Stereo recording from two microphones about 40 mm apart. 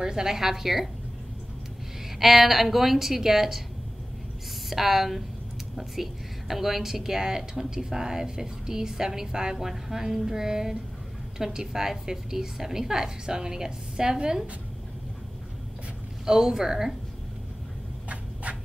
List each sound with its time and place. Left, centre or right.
0.0 s a woman's voice: centre
2.1 s a woman's voice: centre
4.6 s a woman's voice: centre
16.3 s a woman's voice: centre
18.0 s a sound: right